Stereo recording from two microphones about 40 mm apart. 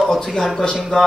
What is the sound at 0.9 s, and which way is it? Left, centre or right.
Speech, left.